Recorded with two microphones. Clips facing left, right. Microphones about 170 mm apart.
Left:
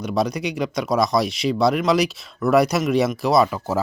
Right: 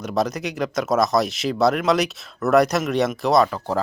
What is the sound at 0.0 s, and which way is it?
Speech, centre (ahead or behind).